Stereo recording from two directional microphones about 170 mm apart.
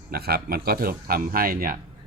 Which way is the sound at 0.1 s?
65° right (ahead or behind).